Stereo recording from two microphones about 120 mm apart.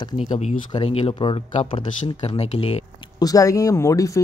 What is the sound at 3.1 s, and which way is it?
Speech, 30° left (ahead or behind).